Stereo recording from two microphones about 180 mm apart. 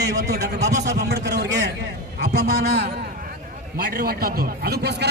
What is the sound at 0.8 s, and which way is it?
A man's voice, 65° right (ahead or behind).